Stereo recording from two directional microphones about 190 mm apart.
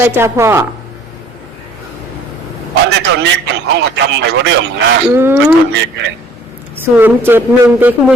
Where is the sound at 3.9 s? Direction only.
70° right (ahead or behind).